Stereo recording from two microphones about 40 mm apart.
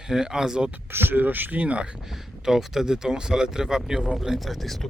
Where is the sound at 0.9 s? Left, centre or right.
Right.